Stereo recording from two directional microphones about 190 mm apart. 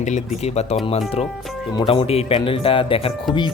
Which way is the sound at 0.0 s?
35° left (ahead or behind).